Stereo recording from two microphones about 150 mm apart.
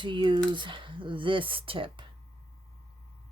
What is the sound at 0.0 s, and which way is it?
Speech, 30° right (ahead or behind).